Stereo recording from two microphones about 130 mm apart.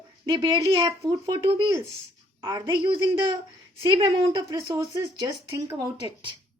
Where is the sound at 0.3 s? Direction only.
35° right (ahead or behind).